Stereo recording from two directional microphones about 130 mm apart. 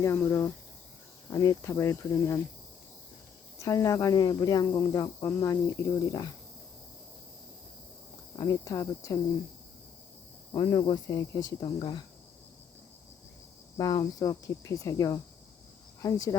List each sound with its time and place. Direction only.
0.0 s cricket: 20° left (ahead or behind)
3.6 s cricket: 25° left (ahead or behind)
8.4 s cricket: 25° left (ahead or behind)
10.5 s speech: 35° left (ahead or behind)
13.7 s cricket: 30° left (ahead or behind)
16.0 s speech: 25° left (ahead or behind)